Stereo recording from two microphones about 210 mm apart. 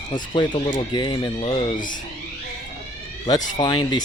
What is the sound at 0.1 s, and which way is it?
Speech, 20° left (ahead or behind).